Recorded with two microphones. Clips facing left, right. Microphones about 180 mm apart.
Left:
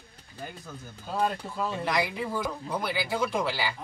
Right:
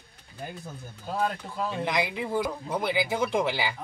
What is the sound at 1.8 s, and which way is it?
Speech, 20° right (ahead or behind).